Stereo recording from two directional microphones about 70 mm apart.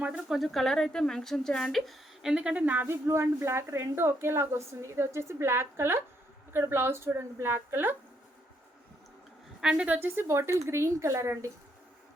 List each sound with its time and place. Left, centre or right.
0.3 s speech: centre
2.2 s a woman's voice: centre
2.8 s speech: right
9.6 s a woman's voice: centre
10.2 s speech: right